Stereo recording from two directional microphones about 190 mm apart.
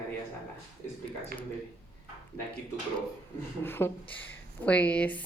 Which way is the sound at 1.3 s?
50° right (ahead or behind).